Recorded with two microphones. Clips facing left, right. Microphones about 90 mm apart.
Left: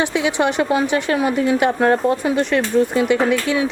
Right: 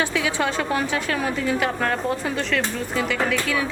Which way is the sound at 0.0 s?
20° left (ahead or behind).